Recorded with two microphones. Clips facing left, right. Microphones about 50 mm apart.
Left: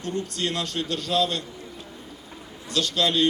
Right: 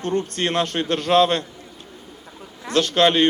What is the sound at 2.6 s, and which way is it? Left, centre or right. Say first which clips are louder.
Speech: right 7 dB; right.